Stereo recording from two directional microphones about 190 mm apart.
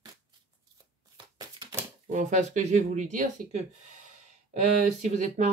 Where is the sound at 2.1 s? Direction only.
40° right (ahead or behind).